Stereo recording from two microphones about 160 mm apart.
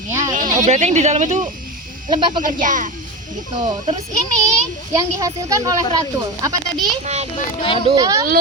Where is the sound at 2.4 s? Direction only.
55° right (ahead or behind).